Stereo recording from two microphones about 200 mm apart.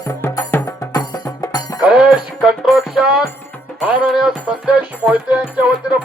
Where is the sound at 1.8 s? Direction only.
5° right (ahead or behind).